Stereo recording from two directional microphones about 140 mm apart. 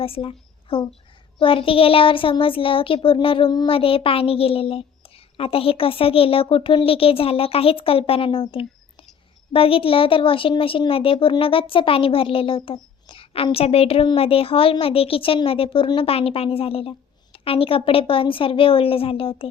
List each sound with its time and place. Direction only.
0.0 s a woman's voice: 40° left (ahead or behind)